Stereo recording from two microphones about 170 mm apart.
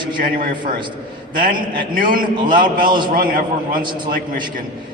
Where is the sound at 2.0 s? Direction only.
55° right (ahead or behind).